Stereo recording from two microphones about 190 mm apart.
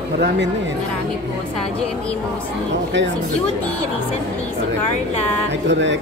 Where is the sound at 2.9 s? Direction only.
70° right (ahead or behind).